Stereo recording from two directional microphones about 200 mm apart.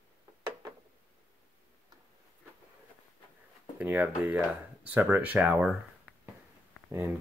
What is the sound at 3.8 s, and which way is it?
Speech, 10° right (ahead or behind).